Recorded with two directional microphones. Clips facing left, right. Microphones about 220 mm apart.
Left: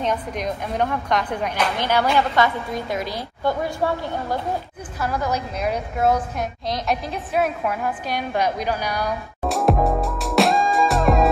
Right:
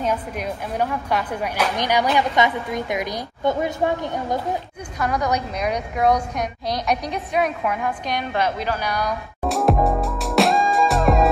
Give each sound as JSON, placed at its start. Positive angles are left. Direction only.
{"t": 0.0, "sound": "a woman's voice", "side_deg": -10}
{"t": 4.9, "sound": "a woman's voice", "side_deg": 5}